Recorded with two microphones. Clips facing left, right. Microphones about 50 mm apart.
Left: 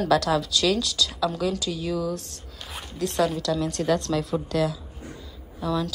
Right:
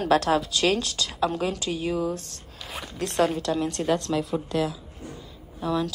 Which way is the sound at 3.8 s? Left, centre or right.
Right.